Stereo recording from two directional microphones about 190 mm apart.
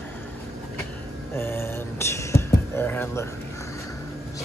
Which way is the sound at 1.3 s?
10° left (ahead or behind).